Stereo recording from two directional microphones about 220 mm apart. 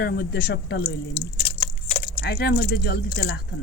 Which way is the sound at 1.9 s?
20° left (ahead or behind).